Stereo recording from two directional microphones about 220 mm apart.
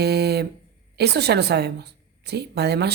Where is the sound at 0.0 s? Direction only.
45° right (ahead or behind).